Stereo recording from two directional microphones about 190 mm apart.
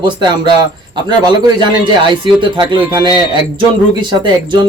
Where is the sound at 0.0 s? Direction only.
25° right (ahead or behind).